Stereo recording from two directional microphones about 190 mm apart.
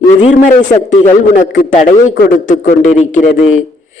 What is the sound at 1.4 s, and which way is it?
A man's voice, 40° left (ahead or behind).